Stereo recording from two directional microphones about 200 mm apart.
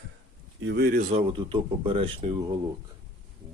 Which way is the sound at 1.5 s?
25° right (ahead or behind).